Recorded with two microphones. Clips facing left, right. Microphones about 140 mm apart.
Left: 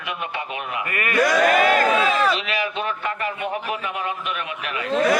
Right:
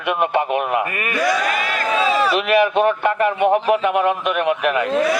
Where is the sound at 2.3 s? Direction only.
65° right (ahead or behind).